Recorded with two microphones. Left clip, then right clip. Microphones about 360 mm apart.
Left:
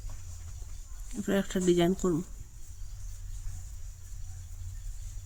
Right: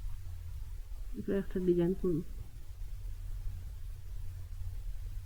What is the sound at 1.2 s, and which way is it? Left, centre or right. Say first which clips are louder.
Speech: left 4 dB; left.